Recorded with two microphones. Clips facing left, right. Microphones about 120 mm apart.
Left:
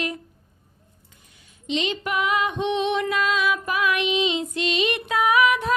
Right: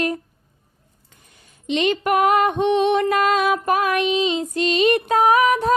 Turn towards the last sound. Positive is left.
turn(degrees=-40)  # may be behind; listen again after turning